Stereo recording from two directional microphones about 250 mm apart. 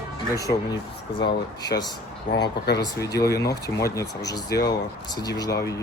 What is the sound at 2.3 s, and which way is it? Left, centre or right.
Speech, left.